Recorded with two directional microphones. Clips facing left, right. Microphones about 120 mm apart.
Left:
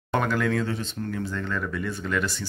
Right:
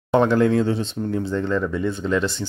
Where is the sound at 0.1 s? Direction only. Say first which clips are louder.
Right 8 dB; 30° right (ahead or behind).